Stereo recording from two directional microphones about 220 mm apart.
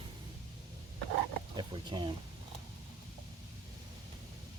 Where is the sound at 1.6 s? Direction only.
20° right (ahead or behind).